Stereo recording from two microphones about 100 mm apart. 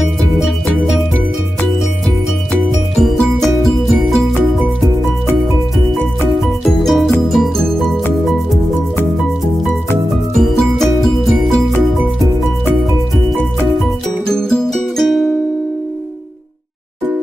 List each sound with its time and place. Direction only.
3.0 s music: centre (ahead or behind)
6.4 s music: centre (ahead or behind)
10.3 s music: 5° left (ahead or behind)
13.7 s music: 5° left (ahead or behind)